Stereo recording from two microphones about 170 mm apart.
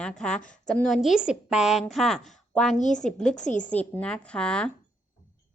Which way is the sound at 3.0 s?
5° left (ahead or behind).